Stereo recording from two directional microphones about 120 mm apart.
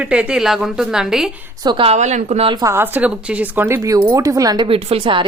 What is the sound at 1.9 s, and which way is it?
Speech, 85° right.